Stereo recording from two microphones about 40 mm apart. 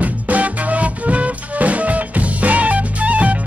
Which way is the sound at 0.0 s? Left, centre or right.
Right.